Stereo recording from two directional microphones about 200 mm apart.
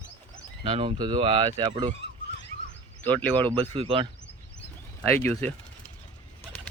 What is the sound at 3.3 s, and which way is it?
Speech, 25° right (ahead or behind).